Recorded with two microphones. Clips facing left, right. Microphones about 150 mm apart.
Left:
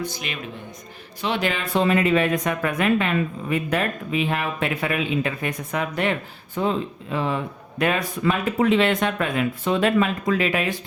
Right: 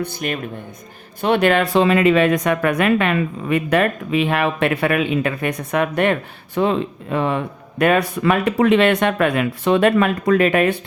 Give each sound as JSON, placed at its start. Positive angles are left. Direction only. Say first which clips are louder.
{"t": 0.0, "sound": "speech", "louder": "right 6 dB", "side_deg": -50}